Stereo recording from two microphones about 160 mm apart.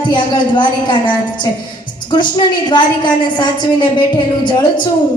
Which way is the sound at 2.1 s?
30° left (ahead or behind).